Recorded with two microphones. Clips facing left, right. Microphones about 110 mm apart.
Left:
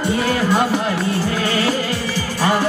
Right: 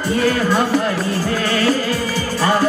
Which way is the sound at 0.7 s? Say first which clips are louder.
Right 1 dB; 40° right (ahead or behind).